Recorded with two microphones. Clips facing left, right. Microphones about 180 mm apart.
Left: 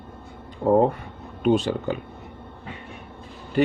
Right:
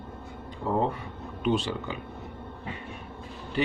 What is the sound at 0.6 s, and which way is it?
Speech, 50° left (ahead or behind).